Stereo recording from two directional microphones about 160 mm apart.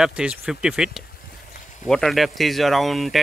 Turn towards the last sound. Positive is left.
turn(degrees=0)  # may be behind; listen again after turning